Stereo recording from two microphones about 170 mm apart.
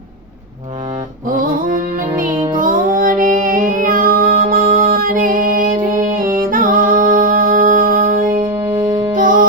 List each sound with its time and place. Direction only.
1.3 s music: 55° right (ahead or behind)
8.5 s music: 15° right (ahead or behind)